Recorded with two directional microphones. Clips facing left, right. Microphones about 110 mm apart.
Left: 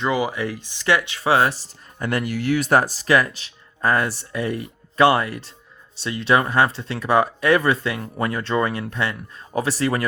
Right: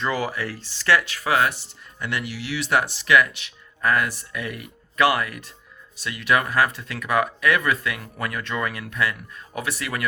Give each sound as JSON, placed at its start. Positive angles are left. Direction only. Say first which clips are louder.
{"t": 0.0, "sound": "speech", "louder": "left 4 dB", "side_deg": 15}